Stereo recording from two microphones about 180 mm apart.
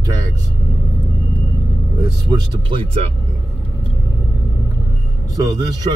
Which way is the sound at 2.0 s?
25° right (ahead or behind).